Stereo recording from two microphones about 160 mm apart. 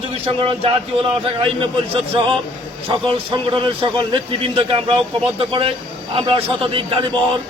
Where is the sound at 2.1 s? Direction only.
35° right (ahead or behind).